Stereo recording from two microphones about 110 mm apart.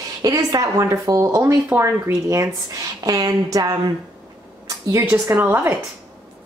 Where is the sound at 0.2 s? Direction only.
35° right (ahead or behind).